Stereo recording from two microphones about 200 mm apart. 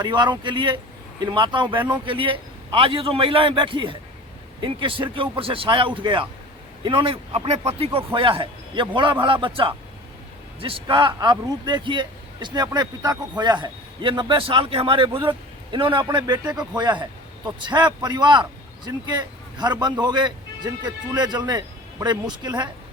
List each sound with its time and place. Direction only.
0.0 s a man's voice: 20° right (ahead or behind)